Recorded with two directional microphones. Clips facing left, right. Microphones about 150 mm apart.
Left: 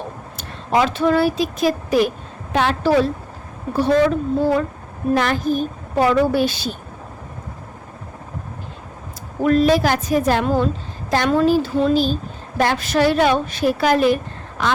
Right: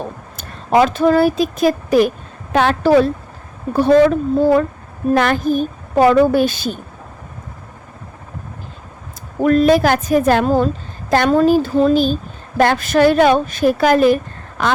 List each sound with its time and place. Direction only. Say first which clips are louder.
0.3 s a woman's voice: right 5 dB; 45° right (ahead or behind)
9.4 s a woman's voice: right 3 dB; 50° right (ahead or behind)